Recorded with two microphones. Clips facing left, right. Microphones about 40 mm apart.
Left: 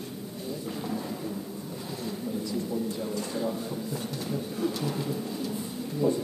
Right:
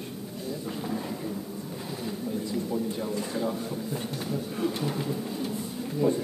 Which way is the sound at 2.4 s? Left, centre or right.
Right.